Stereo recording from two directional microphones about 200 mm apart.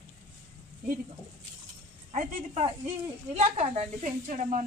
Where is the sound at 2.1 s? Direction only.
30° right (ahead or behind).